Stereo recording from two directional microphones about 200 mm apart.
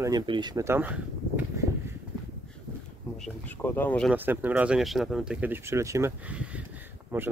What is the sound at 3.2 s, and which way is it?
Speech, 10° left (ahead or behind).